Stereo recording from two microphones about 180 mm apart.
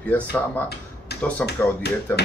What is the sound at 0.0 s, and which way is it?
Speech, 10° left (ahead or behind).